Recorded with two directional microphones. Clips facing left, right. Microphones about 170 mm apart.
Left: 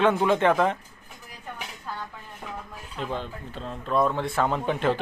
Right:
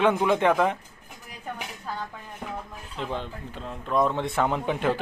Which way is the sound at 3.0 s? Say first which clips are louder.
Even; 20° right (ahead or behind).